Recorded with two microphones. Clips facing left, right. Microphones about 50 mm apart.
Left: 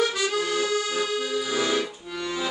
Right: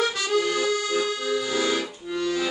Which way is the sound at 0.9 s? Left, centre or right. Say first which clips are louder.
Right 1 dB; centre.